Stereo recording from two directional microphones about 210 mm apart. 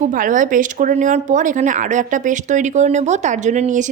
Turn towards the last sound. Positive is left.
turn(degrees=-35)  # may be behind; listen again after turning